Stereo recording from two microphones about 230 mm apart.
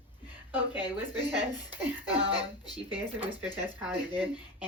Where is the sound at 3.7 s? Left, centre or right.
Centre.